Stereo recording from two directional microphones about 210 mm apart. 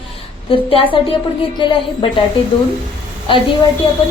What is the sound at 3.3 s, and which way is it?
Speech, 25° left (ahead or behind).